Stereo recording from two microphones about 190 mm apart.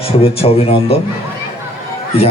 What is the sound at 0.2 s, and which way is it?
Speech, 30° left (ahead or behind).